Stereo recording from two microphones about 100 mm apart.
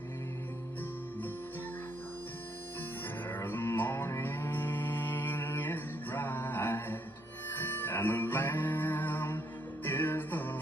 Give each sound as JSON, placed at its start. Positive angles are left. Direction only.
{"t": 3.2, "sound": "music", "side_deg": 20}